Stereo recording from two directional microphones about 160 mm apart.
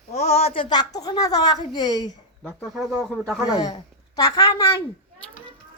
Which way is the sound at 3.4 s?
25° left (ahead or behind).